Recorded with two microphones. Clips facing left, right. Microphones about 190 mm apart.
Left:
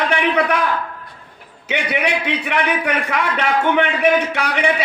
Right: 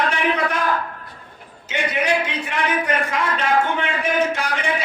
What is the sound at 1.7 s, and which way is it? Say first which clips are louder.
A man's voice: left 1 dB; 65° left (ahead or behind).